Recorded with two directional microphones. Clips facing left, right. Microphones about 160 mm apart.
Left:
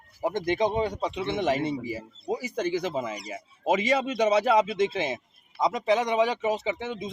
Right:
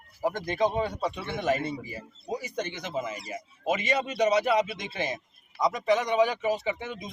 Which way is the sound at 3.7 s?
90° left.